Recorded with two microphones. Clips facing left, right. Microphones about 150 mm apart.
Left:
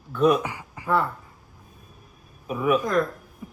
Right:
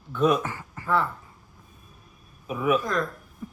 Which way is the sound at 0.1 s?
Centre (ahead or behind).